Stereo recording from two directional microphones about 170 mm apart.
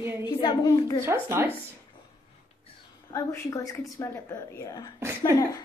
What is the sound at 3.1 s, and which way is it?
A woman's voice, 20° left (ahead or behind).